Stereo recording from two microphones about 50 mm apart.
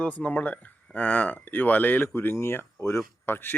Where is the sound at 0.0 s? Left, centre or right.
Left.